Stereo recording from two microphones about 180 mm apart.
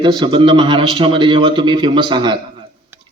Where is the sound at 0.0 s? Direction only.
25° right (ahead or behind).